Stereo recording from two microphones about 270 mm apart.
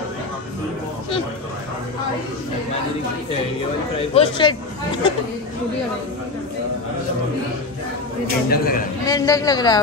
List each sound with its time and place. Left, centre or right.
4.1 s speech: centre
8.5 s a man's voice: left
9.0 s speech: centre